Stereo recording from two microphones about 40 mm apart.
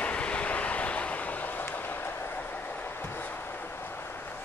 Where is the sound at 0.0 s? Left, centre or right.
Left.